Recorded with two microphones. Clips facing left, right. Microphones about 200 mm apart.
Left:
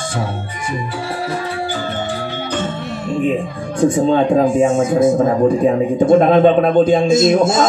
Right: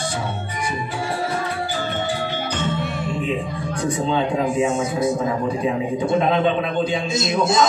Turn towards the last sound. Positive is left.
turn(degrees=50)  # may be behind; listen again after turning